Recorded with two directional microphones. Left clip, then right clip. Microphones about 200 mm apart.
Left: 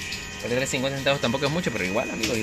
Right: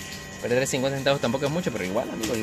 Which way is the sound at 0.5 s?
25° right (ahead or behind).